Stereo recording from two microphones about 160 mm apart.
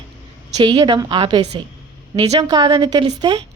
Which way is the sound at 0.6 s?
25° right (ahead or behind).